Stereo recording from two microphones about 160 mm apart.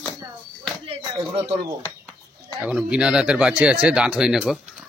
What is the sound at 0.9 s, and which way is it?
Music, 30° right (ahead or behind).